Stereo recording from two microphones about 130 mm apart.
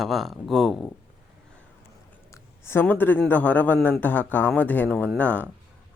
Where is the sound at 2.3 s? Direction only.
20° left (ahead or behind).